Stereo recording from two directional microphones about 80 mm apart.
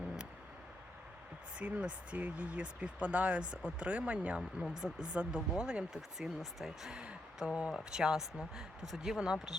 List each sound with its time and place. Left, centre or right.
1.5 s speech: centre